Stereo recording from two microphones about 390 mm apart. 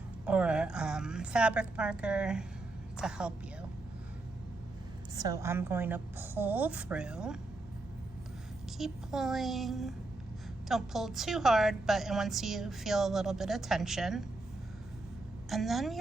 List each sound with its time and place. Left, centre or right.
0.3 s a woman's voice: centre
5.1 s a woman's voice: centre
8.8 s a woman's voice: centre
15.4 s a woman's voice: centre